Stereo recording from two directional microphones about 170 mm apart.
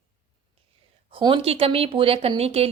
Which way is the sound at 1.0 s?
30° right (ahead or behind).